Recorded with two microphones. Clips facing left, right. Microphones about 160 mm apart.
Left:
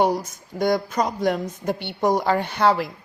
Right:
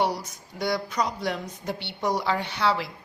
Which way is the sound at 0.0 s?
50° left (ahead or behind).